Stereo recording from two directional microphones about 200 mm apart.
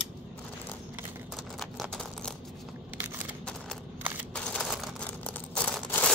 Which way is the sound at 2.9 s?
10° right (ahead or behind).